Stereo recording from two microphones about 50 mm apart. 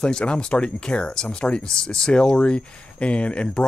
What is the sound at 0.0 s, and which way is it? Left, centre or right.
Speech, centre.